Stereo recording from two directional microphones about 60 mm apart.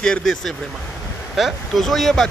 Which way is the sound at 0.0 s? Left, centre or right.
Centre.